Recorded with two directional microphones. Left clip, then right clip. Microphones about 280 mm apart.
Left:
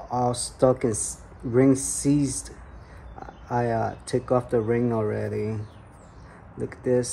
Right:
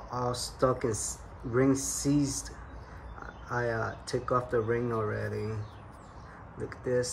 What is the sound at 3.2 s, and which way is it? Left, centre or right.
Speech, left.